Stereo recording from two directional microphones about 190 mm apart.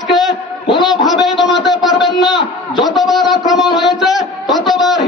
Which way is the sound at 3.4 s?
25° left (ahead or behind).